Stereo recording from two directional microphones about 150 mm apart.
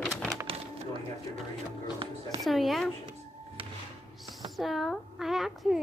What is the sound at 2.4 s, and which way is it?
Speech, centre (ahead or behind).